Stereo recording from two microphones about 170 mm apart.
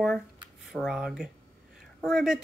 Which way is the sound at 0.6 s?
Centre (ahead or behind).